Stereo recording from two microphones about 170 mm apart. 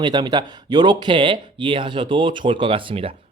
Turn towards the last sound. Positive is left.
turn(degrees=-35)  # may be behind; listen again after turning